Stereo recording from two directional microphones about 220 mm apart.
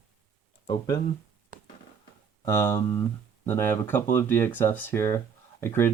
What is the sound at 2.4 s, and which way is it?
Speech, 15° left (ahead or behind).